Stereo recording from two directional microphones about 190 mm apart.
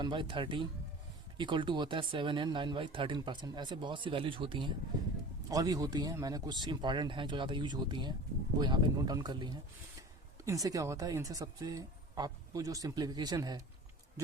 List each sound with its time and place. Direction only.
0.0 s speech: 25° right (ahead or behind)